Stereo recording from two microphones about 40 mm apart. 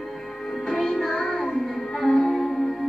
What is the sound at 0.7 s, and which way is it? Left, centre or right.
Music, centre.